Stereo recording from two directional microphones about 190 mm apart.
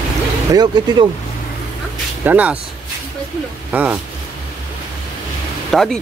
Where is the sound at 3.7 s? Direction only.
5° right (ahead or behind).